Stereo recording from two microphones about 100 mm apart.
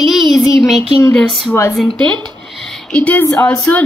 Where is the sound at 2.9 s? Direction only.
15° left (ahead or behind).